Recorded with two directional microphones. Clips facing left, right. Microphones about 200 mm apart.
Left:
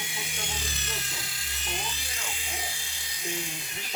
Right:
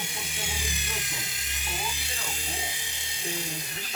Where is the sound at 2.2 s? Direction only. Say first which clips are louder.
Right 2 dB; 40° right (ahead or behind).